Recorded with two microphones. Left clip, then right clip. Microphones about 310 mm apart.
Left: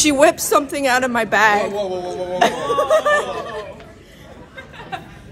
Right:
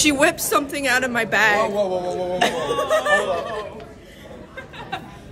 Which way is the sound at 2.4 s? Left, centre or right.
Centre.